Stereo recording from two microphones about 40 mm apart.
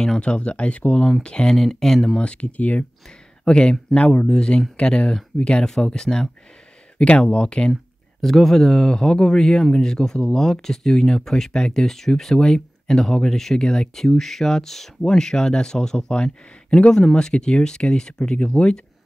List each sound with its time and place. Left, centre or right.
0.2 s speech: left
1.5 s speech: centre
2.1 s speech: left
3.4 s speech: left
3.9 s speech: left
4.3 s speech: centre
7.0 s speech: left
8.2 s speech: centre
12.4 s speech: centre